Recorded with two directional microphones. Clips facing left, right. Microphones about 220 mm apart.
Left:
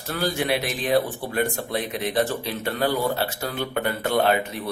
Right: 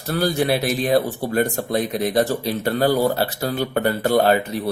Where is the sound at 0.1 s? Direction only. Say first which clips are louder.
Right 5 dB; 40° right (ahead or behind).